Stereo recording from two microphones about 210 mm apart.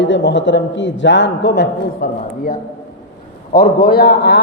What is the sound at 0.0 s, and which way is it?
A man's voice, 60° left (ahead or behind).